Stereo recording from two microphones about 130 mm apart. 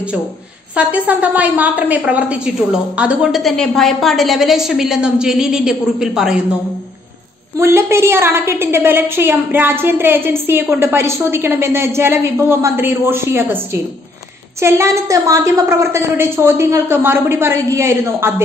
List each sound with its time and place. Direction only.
0.7 s a woman's voice: 10° right (ahead or behind)
7.5 s a woman's voice: 20° right (ahead or behind)